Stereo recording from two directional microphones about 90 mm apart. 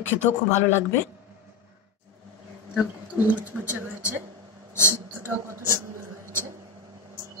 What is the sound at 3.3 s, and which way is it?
Speech, 20° right (ahead or behind).